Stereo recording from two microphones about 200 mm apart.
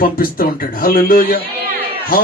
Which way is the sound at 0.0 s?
45° left (ahead or behind).